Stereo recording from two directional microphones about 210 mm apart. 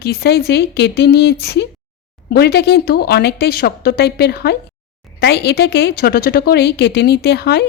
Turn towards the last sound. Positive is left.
turn(degrees=50)  # may be behind; listen again after turning